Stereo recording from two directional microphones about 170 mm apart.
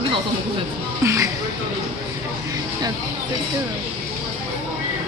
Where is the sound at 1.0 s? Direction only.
15° right (ahead or behind).